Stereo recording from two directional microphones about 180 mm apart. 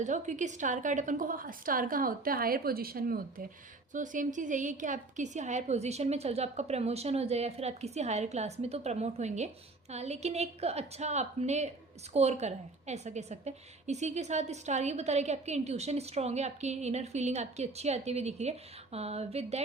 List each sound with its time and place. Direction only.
0.0 s a woman's voice: 40° right (ahead or behind)